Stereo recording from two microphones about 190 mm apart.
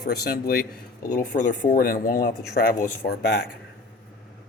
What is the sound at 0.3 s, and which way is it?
Speech, 50° left (ahead or behind).